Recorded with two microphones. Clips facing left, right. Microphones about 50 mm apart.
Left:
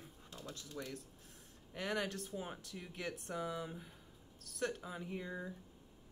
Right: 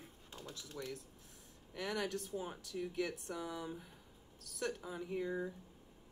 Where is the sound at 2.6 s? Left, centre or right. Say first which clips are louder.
Right 6 dB; left.